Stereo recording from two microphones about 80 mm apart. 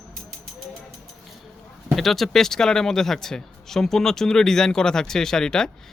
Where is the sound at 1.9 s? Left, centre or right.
Centre.